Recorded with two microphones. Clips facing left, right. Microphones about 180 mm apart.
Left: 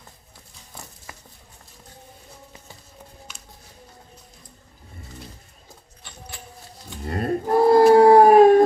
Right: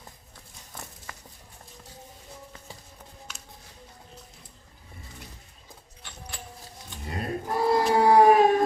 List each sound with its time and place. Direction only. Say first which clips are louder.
7.0 s livestock: left 8 dB; 50° left (ahead or behind)